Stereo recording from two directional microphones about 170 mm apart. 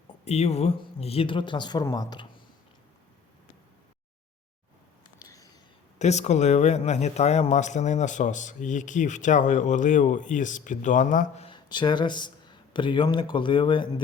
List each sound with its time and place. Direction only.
0.3 s speech: 40° left (ahead or behind)
5.2 s a sound: 20° left (ahead or behind)
6.0 s speech: 40° left (ahead or behind)
11.4 s speech: 25° left (ahead or behind)